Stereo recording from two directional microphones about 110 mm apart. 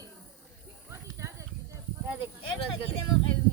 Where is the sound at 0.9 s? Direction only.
25° right (ahead or behind).